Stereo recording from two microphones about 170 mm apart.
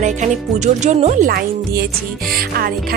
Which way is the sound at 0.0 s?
45° right (ahead or behind).